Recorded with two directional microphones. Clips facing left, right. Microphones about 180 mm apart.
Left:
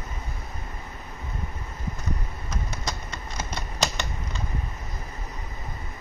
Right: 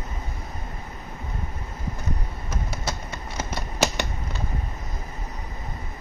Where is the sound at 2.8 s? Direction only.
10° right (ahead or behind).